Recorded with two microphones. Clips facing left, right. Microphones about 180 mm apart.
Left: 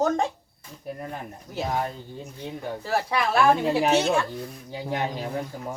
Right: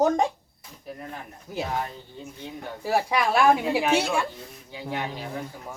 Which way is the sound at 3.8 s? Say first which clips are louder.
Left 2 dB; 35° left (ahead or behind).